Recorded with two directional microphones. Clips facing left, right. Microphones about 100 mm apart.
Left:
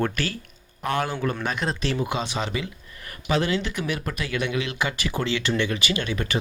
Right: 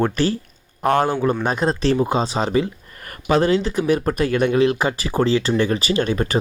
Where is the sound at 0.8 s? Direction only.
45° right (ahead or behind).